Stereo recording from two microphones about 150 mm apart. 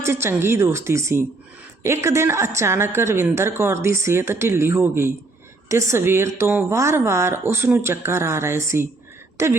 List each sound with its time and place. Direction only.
0.0 s a woman's voice: 15° right (ahead or behind)